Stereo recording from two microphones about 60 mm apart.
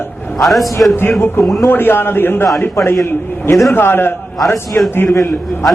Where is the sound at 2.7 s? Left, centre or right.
Left.